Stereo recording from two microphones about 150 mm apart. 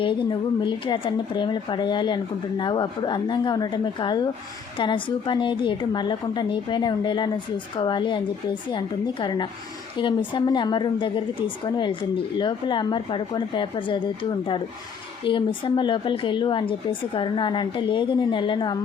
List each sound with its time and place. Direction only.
0.0 s speech: 30° left (ahead or behind)
9.2 s speech: 30° left (ahead or behind)